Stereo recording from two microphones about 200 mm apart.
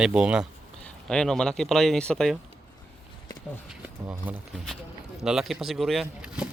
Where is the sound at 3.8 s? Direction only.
10° right (ahead or behind).